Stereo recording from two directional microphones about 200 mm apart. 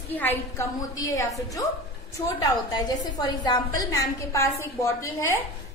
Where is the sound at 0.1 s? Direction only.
10° left (ahead or behind).